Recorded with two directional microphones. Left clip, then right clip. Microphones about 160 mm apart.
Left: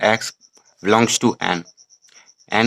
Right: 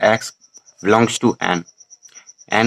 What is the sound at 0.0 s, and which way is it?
Speech, 35° left (ahead or behind).